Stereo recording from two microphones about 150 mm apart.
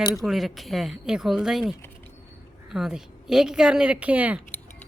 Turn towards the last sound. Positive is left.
turn(degrees=-10)  # may be behind; listen again after turning